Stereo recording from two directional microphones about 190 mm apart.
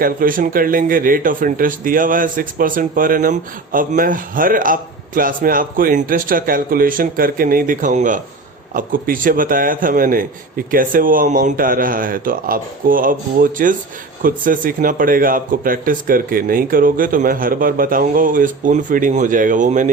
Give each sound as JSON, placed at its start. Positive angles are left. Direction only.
{"t": 0.0, "sound": "a man's voice", "side_deg": -50}